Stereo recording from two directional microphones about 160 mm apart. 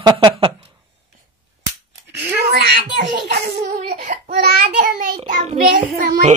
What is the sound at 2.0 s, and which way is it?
Giggle, 80° right.